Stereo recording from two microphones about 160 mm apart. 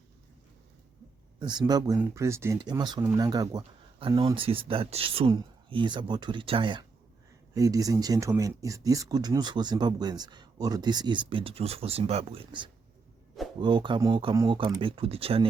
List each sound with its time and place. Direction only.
1.4 s speech: 25° right (ahead or behind)
4.4 s speech: 35° right (ahead or behind)